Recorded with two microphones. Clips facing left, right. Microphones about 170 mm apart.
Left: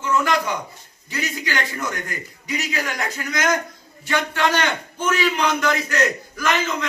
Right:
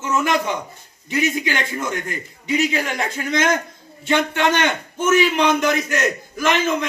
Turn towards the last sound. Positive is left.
turn(degrees=-20)  # may be behind; listen again after turning